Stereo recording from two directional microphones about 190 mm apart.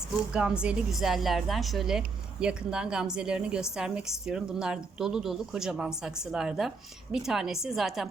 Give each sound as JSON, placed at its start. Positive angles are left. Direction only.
{"t": 0.3, "sound": "a woman's voice", "side_deg": -5}